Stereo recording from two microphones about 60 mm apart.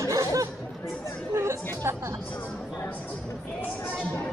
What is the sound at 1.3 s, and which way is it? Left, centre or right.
Chatter, right.